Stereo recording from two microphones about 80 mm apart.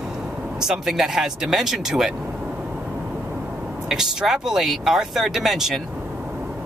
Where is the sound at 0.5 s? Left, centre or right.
Centre.